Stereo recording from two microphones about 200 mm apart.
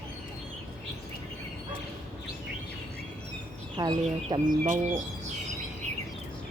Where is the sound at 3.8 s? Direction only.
20° right (ahead or behind).